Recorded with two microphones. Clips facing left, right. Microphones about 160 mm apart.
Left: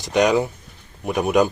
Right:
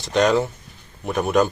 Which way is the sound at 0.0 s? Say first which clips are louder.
Left 1 dB; 15° left (ahead or behind).